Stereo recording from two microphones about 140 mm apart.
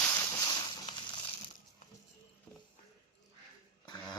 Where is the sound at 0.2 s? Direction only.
30° left (ahead or behind).